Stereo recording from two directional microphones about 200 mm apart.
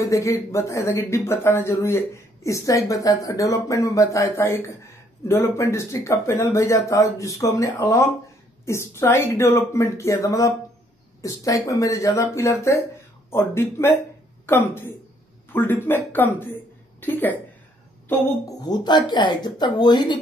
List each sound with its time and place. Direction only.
0.0 s a woman's voice: 15° left (ahead or behind)